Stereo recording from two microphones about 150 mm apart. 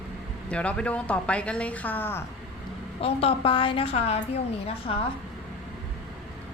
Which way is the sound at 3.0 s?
40° left (ahead or behind).